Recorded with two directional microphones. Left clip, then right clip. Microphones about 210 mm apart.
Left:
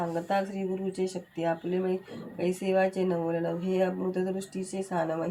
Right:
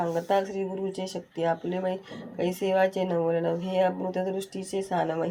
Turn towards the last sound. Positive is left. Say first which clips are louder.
# right 3 dB
turn(degrees=-40)  # may be behind; listen again after turning